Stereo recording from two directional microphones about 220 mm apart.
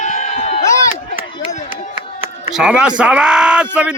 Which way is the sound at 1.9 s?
25° right (ahead or behind).